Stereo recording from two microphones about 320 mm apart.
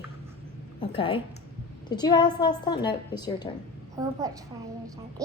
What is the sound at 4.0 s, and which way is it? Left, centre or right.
Speech, centre.